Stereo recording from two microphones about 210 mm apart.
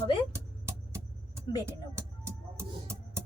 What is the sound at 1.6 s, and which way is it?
Music, 10° right (ahead or behind).